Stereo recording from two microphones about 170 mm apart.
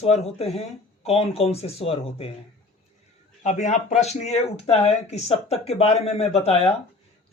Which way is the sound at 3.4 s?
45° left (ahead or behind).